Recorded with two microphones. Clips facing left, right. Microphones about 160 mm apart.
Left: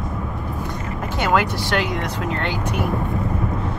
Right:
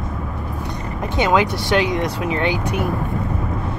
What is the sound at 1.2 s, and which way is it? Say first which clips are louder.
Speech: right 3 dB; 15° right (ahead or behind).